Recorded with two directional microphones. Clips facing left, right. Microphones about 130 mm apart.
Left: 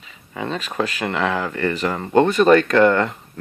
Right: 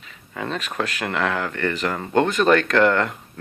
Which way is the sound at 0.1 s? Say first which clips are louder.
Left 2 dB; centre (ahead or behind).